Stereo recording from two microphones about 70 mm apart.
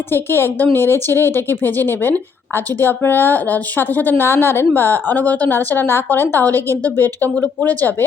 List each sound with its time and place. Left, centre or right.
0.1 s a woman's voice: left